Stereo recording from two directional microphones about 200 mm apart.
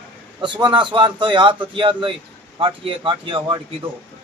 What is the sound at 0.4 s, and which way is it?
A man's voice, 25° right (ahead or behind).